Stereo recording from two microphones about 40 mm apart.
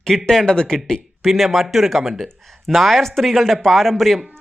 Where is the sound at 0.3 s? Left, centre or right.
Centre.